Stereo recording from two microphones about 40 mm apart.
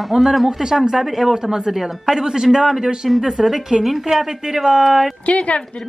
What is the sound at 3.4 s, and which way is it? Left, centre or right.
Speech, centre.